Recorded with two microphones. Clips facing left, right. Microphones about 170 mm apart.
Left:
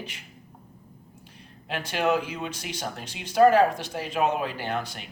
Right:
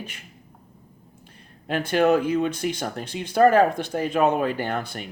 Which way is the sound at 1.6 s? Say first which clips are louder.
Right 6 dB; 50° right (ahead or behind).